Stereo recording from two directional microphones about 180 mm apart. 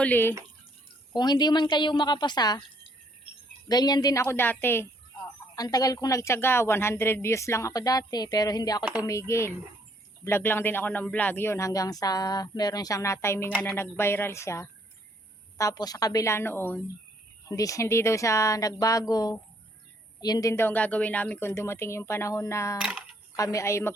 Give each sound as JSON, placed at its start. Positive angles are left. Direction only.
{"t": 0.0, "sound": "speech", "side_deg": 10}
{"t": 1.1, "sound": "a woman's voice", "side_deg": 25}
{"t": 3.7, "sound": "a woman's voice", "side_deg": 20}